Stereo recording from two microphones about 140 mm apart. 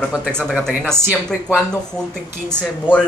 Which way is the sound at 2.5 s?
10° left (ahead or behind).